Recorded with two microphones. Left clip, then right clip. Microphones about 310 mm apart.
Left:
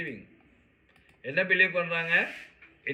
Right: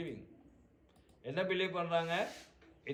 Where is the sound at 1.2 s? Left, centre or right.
Centre.